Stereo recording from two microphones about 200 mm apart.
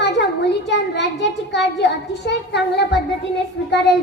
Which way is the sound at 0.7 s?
60° left (ahead or behind).